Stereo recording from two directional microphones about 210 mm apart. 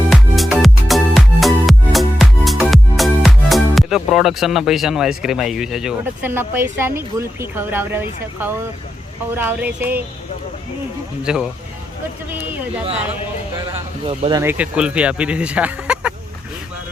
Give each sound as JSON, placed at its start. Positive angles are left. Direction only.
{"t": 0.1, "sound": "music", "side_deg": 0}
{"t": 9.3, "sound": "speech", "side_deg": -10}
{"t": 11.2, "sound": "speech", "side_deg": -5}
{"t": 14.0, "sound": "speech", "side_deg": -25}
{"t": 14.4, "sound": "speech", "side_deg": -5}